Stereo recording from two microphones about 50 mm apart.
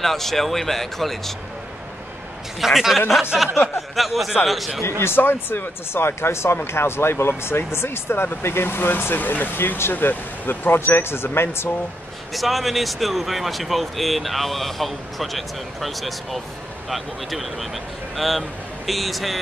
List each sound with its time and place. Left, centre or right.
0.0 s speech: centre
2.6 s speech: centre
5.0 s speech: left
12.4 s a man's voice: centre